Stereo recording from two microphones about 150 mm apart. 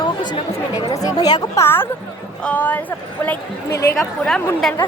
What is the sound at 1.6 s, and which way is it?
A woman's voice, 15° left (ahead or behind).